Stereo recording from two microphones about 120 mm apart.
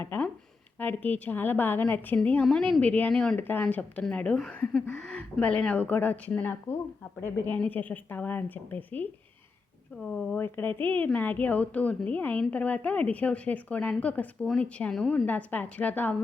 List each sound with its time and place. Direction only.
0.0 s speech: 15° left (ahead or behind)
3.3 s speech: 15° left (ahead or behind)